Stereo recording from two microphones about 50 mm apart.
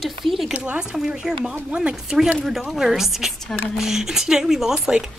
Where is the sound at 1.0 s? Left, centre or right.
Centre.